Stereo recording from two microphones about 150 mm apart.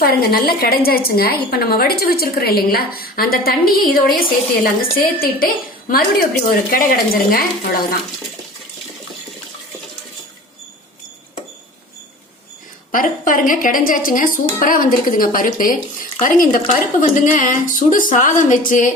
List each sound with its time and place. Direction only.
0.0 s a woman's voice: 90° left
12.9 s speech: 70° left (ahead or behind)